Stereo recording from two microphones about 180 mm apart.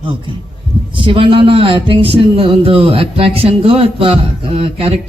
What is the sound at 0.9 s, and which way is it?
Speech, 30° right (ahead or behind).